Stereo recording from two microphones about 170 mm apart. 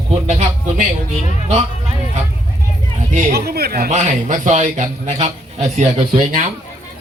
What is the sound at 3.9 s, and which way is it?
A man's voice, 45° right (ahead or behind).